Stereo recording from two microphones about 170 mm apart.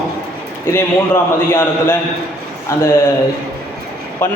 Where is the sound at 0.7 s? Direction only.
15° left (ahead or behind).